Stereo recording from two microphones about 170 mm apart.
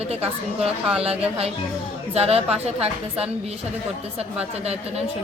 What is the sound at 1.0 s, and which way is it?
A woman's voice, 35° right (ahead or behind).